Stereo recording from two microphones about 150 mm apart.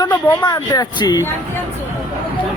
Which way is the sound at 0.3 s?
20° left (ahead or behind).